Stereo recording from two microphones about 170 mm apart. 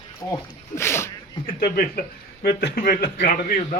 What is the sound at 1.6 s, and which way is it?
A man's voice, 60° left (ahead or behind).